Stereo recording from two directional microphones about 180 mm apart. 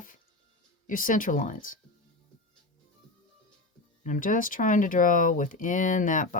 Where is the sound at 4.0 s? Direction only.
45° left (ahead or behind).